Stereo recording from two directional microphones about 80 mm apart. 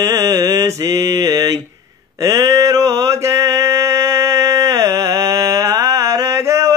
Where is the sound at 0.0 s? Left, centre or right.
Right.